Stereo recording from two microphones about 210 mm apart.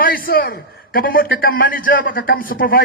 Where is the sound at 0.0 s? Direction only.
45° left (ahead or behind).